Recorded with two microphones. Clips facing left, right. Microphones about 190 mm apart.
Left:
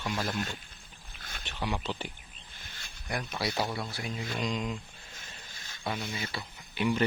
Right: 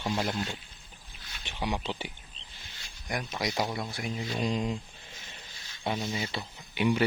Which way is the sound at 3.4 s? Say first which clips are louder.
Right 1 dB; 15° right (ahead or behind).